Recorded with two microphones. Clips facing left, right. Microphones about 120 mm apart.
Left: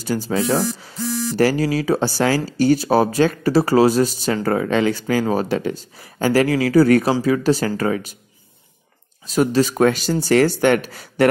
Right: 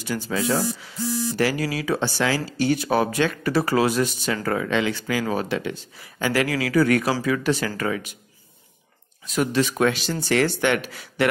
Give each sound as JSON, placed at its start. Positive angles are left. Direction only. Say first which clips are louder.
{"t": 0.0, "sound": "speech", "louder": "left 5 dB", "side_deg": 35}
{"t": 9.2, "sound": "speech", "louder": "left 5 dB", "side_deg": 35}